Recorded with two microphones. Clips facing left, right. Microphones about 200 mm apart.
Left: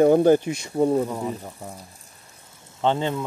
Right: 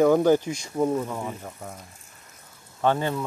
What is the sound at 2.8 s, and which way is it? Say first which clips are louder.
Speech: left 1 dB; 20° left (ahead or behind).